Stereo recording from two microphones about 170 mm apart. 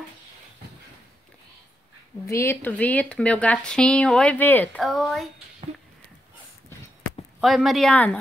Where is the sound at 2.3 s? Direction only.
15° left (ahead or behind).